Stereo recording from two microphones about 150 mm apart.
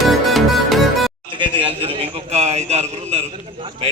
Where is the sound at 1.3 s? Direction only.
35° right (ahead or behind).